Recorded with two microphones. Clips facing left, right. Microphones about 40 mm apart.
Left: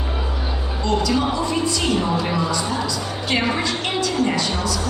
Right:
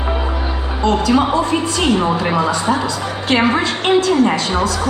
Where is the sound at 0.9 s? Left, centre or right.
Right.